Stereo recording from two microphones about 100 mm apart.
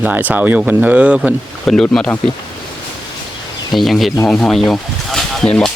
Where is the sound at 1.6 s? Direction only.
5° left (ahead or behind).